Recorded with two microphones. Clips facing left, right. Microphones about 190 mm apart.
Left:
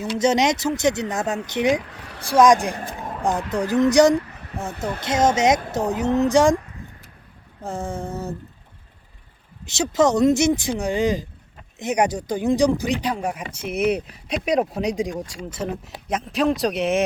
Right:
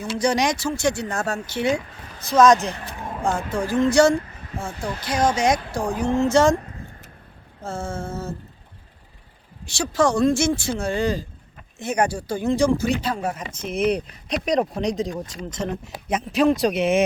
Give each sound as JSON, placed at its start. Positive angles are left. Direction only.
{"t": 0.2, "sound": "speech", "side_deg": 20}
{"t": 7.6, "sound": "speech", "side_deg": 15}
{"t": 9.6, "sound": "speech", "side_deg": 20}